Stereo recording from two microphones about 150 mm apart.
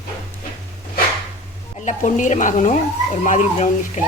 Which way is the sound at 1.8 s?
55° left (ahead or behind).